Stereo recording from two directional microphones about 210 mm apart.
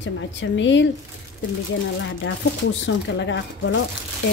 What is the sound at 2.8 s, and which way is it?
A woman's voice, 60° left (ahead or behind).